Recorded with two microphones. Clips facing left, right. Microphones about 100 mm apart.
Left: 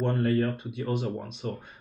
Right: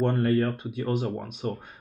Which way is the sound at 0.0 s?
55° right (ahead or behind).